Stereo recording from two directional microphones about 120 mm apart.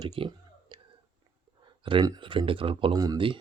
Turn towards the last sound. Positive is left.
turn(degrees=-30)  # may be behind; listen again after turning